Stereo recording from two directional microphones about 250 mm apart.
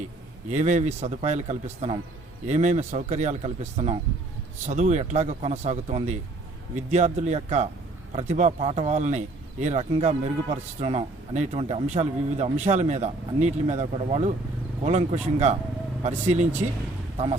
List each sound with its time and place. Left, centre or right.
0.5 s speech: right